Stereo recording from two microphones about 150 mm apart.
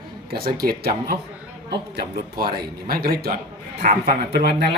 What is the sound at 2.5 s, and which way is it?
Speech, 90° right.